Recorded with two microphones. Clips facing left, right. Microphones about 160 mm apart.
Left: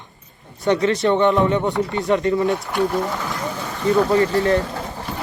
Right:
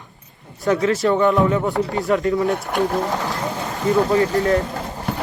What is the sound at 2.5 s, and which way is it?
Speech, 60° right (ahead or behind).